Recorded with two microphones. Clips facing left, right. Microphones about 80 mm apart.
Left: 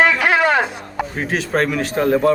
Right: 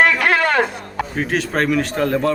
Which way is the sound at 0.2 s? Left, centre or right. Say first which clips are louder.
Left 1 dB; right.